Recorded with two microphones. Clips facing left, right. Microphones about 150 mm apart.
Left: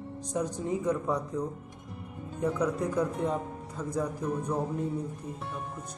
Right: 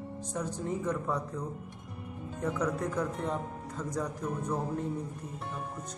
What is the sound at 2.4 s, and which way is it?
Speech, 10° left (ahead or behind).